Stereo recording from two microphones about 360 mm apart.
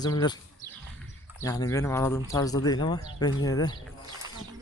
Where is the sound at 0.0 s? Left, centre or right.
Centre.